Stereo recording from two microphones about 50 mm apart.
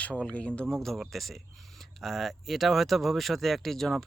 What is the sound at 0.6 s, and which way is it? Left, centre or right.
Speech, centre.